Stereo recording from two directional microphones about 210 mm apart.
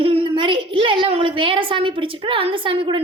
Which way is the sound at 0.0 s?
25° right (ahead or behind).